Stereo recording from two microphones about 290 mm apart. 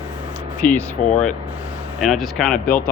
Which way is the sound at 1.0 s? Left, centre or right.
Left.